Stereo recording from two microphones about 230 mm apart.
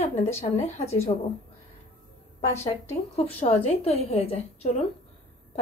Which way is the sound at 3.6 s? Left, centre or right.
Left.